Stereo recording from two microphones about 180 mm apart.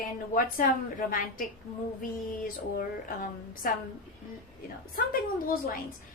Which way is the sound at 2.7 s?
50° left (ahead or behind).